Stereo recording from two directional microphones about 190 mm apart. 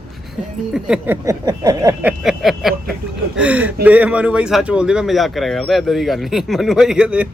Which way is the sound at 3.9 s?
10° right (ahead or behind).